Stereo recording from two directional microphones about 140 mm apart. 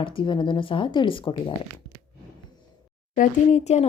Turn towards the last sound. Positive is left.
turn(degrees=55)  # may be behind; listen again after turning